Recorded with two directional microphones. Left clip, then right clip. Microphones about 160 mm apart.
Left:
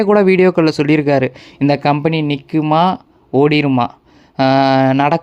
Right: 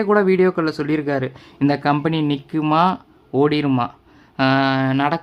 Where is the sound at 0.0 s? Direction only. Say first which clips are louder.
Left 5 dB; 35° left (ahead or behind).